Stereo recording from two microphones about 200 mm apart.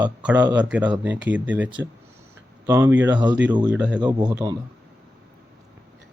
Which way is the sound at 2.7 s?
10° right (ahead or behind).